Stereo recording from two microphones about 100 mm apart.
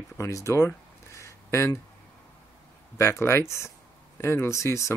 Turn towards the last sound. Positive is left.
turn(degrees=30)  # may be behind; listen again after turning